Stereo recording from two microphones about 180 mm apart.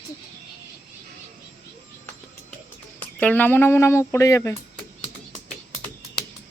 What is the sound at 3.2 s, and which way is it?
Speech, 10° left (ahead or behind).